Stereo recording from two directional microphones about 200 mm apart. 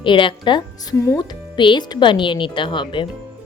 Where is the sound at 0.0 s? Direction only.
25° left (ahead or behind).